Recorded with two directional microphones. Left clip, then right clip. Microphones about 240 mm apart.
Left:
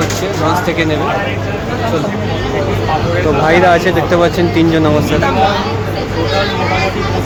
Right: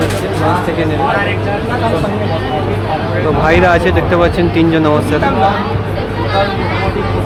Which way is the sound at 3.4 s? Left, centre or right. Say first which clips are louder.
Left 1 dB; centre.